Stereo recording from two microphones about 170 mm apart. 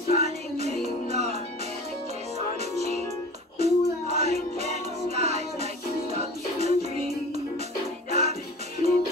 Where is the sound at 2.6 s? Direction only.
40° right (ahead or behind).